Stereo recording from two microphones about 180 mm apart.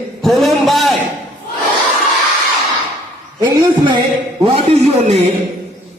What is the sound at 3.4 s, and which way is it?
Speech, 20° right (ahead or behind).